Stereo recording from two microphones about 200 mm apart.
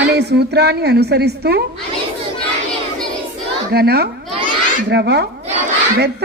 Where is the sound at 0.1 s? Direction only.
55° right (ahead or behind).